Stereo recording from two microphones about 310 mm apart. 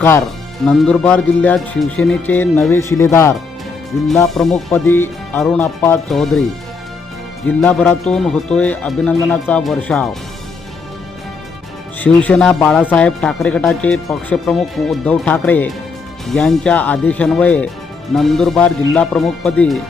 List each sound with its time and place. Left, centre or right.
0.6 s speech: centre
7.4 s speech: centre
11.9 s speech: centre